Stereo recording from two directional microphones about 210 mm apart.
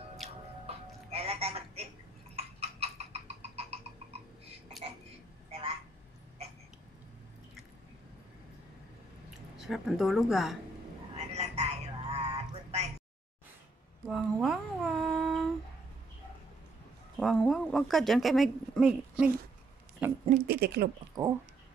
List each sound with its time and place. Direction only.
0.7 s music: 30° right (ahead or behind)
2.3 s frog: 30° right (ahead or behind)
9.6 s speech: centre (ahead or behind)
11.1 s frog: 30° right (ahead or behind)
12.4 s a sound: 30° right (ahead or behind)
14.0 s humming: 5° right (ahead or behind)
17.2 s a sound: centre (ahead or behind)
20.4 s speech: 50° right (ahead or behind)